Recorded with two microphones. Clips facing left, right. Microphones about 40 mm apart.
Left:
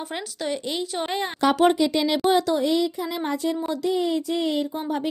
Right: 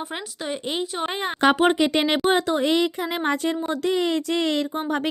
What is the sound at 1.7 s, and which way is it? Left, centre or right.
Speech, right.